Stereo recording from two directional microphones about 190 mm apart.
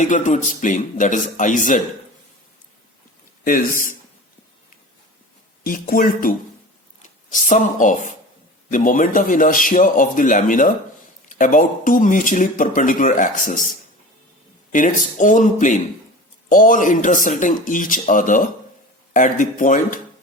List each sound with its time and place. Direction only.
0.0 s speech: 40° left (ahead or behind)
3.4 s speech: 45° left (ahead or behind)
5.6 s speech: 45° left (ahead or behind)